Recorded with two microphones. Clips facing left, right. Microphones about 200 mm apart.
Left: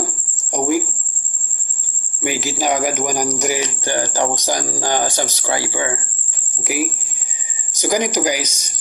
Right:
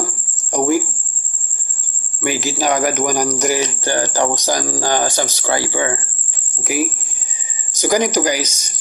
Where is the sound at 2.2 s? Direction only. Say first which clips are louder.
Right 2 dB; 15° left (ahead or behind).